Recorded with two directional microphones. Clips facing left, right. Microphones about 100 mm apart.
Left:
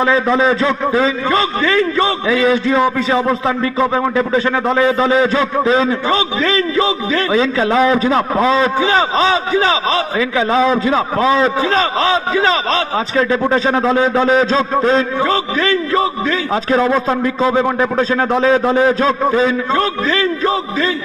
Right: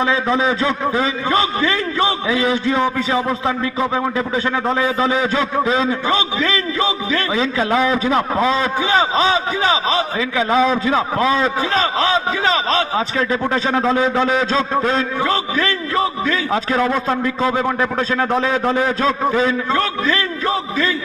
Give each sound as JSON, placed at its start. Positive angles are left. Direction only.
{"t": 0.0, "sound": "a man's voice", "side_deg": 40}
{"t": 2.2, "sound": "a man's voice", "side_deg": 50}
{"t": 10.2, "sound": "a man's voice", "side_deg": 30}
{"t": 13.5, "sound": "a man's voice", "side_deg": 30}